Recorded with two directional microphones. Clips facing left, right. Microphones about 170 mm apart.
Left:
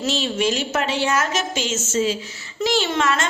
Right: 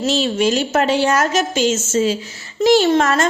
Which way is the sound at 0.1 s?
40° right (ahead or behind).